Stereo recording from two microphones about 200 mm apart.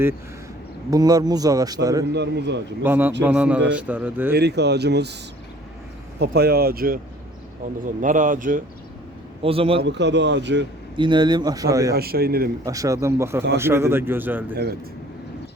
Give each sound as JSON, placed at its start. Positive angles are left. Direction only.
{"t": 0.9, "sound": "speech", "side_deg": -20}
{"t": 2.1, "sound": "a man's voice", "side_deg": -60}
{"t": 2.8, "sound": "a man's voice", "side_deg": -10}
{"t": 4.4, "sound": "a man's voice", "side_deg": -55}
{"t": 6.1, "sound": "speech", "side_deg": -55}
{"t": 8.0, "sound": "speech", "side_deg": -40}
{"t": 9.4, "sound": "speech", "side_deg": -30}
{"t": 9.8, "sound": "a man's voice", "side_deg": -60}
{"t": 10.9, "sound": "speech", "side_deg": -25}
{"t": 11.9, "sound": "speech", "side_deg": -50}
{"t": 12.6, "sound": "a man's voice", "side_deg": -15}
{"t": 14.5, "sound": "speech", "side_deg": -50}